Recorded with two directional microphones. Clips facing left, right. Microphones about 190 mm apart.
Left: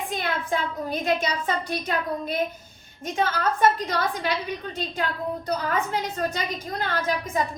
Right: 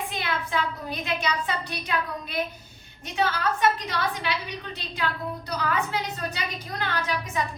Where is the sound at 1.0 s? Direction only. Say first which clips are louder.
Left 3 dB; 45° left (ahead or behind).